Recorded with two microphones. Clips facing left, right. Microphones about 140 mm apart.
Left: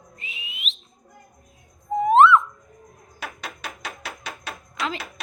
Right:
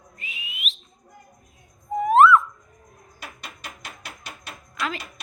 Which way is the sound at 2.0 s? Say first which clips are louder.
Even; 25° left (ahead or behind).